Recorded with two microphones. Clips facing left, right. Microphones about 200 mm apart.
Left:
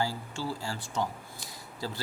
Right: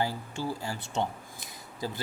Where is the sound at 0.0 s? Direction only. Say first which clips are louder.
Right 1 dB; 20° right (ahead or behind).